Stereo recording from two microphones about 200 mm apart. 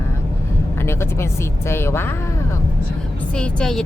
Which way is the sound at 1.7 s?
10° left (ahead or behind).